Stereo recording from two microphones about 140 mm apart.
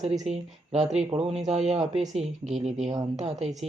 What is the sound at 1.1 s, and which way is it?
Speech, 45° right (ahead or behind).